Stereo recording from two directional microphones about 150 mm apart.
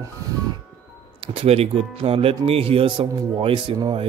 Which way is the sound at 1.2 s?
40° right (ahead or behind).